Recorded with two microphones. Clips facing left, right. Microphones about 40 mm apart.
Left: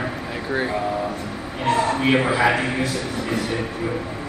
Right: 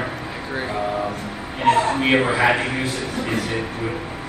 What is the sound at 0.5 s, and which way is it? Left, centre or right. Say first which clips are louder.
Speech: left 3 dB; centre.